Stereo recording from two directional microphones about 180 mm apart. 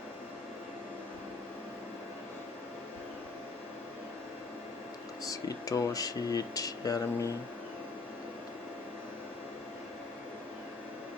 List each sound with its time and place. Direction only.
5.3 s speech: 20° left (ahead or behind)